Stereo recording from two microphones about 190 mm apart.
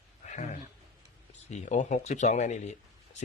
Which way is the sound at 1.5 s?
40° left (ahead or behind).